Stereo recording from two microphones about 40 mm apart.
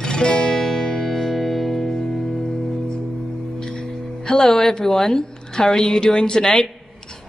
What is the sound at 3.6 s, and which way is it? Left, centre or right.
Music, left.